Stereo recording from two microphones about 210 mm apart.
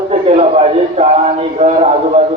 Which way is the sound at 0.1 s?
30° right (ahead or behind).